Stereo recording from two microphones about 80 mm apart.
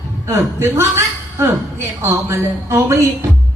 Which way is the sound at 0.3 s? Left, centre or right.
Right.